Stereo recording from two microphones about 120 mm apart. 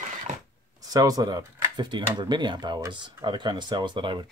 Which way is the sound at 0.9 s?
30° right (ahead or behind).